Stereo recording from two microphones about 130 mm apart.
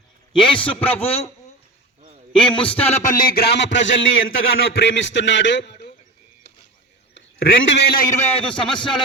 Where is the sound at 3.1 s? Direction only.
90° left.